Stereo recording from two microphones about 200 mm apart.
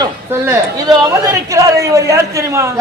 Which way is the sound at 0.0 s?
15° right (ahead or behind).